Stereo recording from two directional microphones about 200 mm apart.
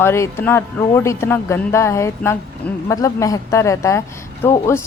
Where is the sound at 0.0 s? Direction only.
10° left (ahead or behind).